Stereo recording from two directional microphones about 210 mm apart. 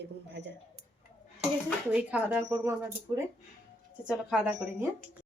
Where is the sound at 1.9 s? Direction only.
5° right (ahead or behind).